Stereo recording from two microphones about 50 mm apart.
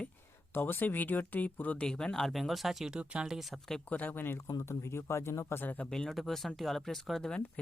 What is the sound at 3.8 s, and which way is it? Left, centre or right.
Speech, left.